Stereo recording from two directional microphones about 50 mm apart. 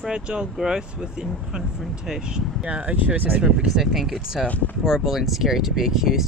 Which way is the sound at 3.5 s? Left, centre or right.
Centre.